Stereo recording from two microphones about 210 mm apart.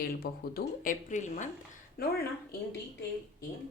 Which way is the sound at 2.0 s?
45° left (ahead or behind).